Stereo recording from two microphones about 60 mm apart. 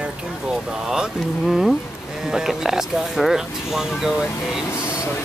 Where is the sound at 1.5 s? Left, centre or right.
Centre.